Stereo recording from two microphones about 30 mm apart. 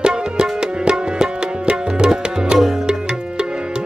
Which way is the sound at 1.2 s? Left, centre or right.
Right.